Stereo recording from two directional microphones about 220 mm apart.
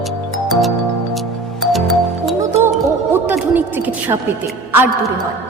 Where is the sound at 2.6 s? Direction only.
10° right (ahead or behind).